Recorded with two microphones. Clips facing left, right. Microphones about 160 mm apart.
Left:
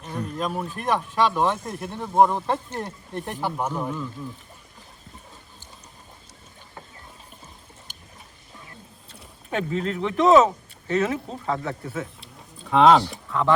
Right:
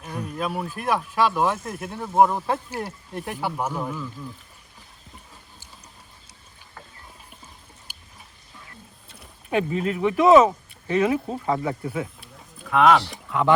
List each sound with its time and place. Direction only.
0.0 s speech: 10° right (ahead or behind)
7.9 s tick-tock: 10° right (ahead or behind)
9.5 s speech: 10° right (ahead or behind)
12.2 s a sound: 30° left (ahead or behind)